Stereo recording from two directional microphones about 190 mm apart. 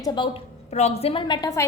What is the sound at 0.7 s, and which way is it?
Speech, 35° left (ahead or behind).